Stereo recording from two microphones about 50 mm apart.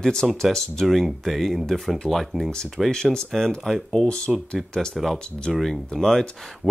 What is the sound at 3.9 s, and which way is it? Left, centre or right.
Speech, centre.